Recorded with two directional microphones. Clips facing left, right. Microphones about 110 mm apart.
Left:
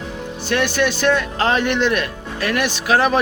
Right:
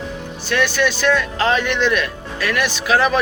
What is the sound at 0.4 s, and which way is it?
Speech, 50° left (ahead or behind).